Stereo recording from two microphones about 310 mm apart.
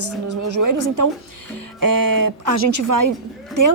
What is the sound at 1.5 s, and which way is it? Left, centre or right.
Speech, right.